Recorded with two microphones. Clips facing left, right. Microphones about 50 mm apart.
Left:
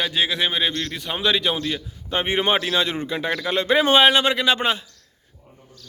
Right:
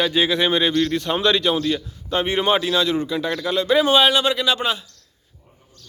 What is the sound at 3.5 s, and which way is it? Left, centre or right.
Speech, left.